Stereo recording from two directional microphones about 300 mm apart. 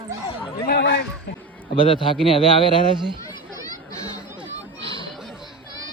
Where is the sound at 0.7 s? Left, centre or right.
Left.